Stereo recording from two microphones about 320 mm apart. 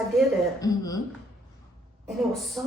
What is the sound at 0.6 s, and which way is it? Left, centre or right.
Speech, centre.